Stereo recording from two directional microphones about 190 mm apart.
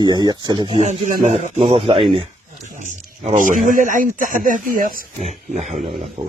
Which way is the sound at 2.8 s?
40° right (ahead or behind).